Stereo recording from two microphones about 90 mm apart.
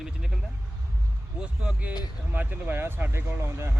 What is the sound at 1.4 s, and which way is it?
Speech, 10° right (ahead or behind).